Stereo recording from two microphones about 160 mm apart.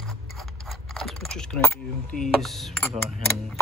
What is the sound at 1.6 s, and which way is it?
Speech, 10° left (ahead or behind).